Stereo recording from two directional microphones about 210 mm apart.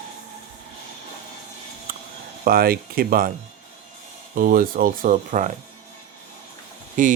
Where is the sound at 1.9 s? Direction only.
45° right (ahead or behind).